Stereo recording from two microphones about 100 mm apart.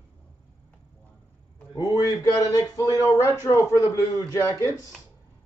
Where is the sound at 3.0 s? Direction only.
30° left (ahead or behind).